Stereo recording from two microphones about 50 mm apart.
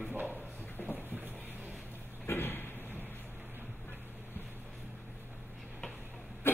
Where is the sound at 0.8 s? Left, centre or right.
Left.